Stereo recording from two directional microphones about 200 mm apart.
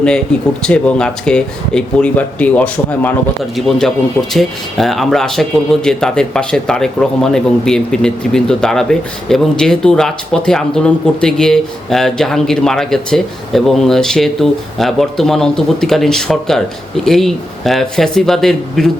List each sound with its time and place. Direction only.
0.6 s speech: 5° left (ahead or behind)